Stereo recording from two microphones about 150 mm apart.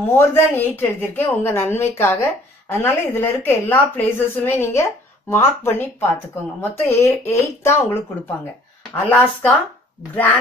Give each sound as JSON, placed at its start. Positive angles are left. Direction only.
{"t": 0.1, "sound": "a woman's voice", "side_deg": 15}